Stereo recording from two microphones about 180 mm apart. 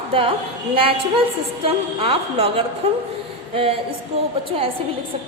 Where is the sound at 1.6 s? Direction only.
35° right (ahead or behind).